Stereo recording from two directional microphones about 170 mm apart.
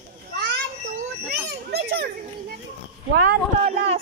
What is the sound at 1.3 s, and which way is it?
Children playing, 70° right (ahead or behind).